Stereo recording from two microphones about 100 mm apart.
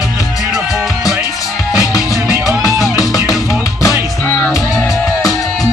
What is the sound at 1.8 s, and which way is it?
Music, 35° left (ahead or behind).